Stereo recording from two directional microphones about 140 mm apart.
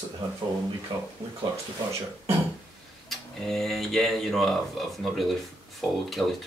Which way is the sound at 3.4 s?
Centre (ahead or behind).